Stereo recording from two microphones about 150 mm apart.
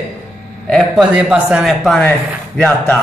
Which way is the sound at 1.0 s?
5° right (ahead or behind).